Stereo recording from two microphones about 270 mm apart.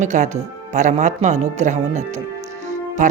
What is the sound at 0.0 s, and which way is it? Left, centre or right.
A woman's voice, right.